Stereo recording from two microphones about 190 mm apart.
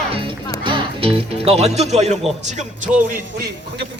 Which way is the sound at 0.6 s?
25° right (ahead or behind).